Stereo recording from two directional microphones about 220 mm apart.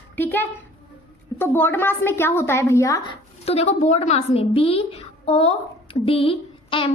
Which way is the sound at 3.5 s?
30° left (ahead or behind).